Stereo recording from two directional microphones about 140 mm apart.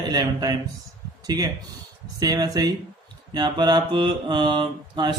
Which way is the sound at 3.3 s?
30° right (ahead or behind).